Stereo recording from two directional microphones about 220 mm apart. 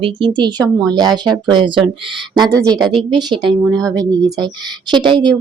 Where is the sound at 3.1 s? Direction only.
20° right (ahead or behind).